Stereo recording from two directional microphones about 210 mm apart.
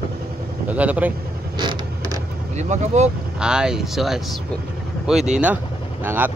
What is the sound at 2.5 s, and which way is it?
Speech, 35° right (ahead or behind).